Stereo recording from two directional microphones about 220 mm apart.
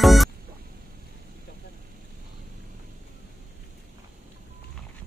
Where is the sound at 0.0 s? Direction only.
Centre (ahead or behind).